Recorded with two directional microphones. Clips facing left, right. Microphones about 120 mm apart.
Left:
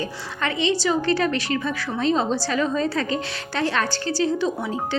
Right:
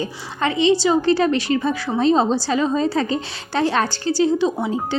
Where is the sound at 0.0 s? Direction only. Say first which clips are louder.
Right 4 dB; 30° right (ahead or behind).